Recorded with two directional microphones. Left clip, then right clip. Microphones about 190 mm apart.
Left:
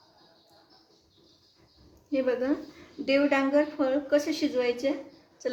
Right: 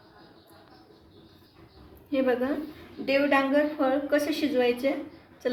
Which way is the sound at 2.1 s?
20° left (ahead or behind).